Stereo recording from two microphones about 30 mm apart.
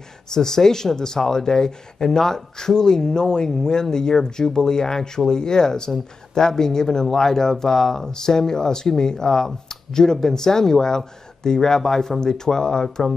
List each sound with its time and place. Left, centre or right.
0.3 s speech: centre